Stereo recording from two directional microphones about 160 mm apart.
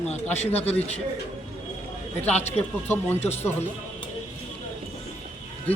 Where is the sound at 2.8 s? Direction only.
15° left (ahead or behind).